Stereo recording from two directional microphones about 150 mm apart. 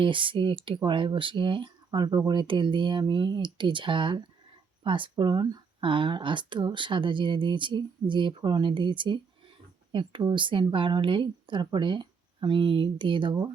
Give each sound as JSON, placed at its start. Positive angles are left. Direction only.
{"t": 0.0, "sound": "speech", "side_deg": -35}